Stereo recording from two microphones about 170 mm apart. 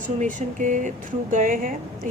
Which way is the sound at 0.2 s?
45° right (ahead or behind).